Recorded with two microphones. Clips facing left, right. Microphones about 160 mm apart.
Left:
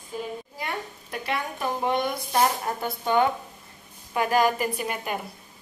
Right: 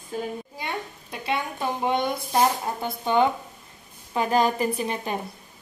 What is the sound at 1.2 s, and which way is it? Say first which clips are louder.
A woman's voice: right 2 dB; 20° right (ahead or behind).